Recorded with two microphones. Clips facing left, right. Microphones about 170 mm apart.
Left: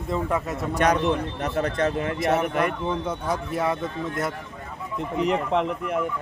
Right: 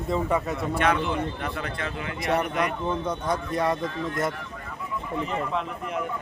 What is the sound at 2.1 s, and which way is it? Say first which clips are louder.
A man's voice: right 2 dB; centre (ahead or behind).